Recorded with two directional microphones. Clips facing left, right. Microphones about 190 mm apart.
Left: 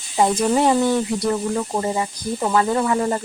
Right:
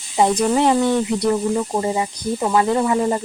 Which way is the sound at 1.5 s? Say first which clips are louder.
Right 2 dB; 10° right (ahead or behind).